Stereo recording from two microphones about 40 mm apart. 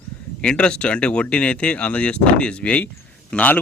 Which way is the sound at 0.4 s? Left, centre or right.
Left.